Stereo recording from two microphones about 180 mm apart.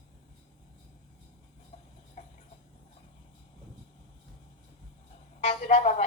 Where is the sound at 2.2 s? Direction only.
40° left (ahead or behind).